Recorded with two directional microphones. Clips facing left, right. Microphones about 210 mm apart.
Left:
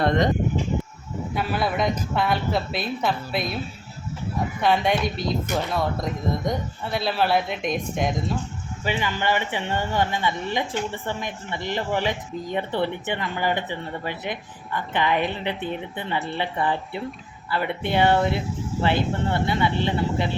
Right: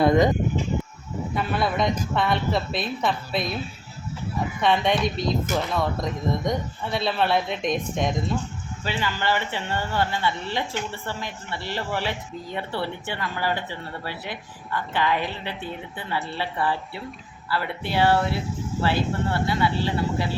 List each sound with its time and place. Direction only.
0.0 s speech: 5° right (ahead or behind)
1.4 s speech: centre (ahead or behind)
4.6 s speech: 5° left (ahead or behind)
8.8 s speech: 15° left (ahead or behind)